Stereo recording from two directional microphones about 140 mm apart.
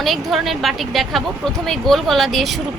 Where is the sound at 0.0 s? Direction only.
Centre (ahead or behind).